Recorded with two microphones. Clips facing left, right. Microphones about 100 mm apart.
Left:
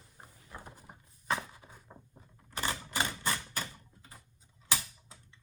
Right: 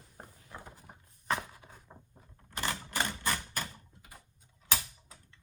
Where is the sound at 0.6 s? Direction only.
5° left (ahead or behind).